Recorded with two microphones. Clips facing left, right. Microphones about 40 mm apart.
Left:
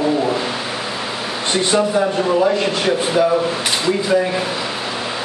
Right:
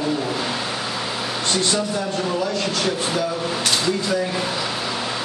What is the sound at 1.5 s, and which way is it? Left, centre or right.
Speech, left.